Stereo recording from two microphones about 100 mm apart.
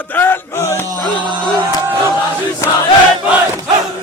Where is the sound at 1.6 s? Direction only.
20° right (ahead or behind).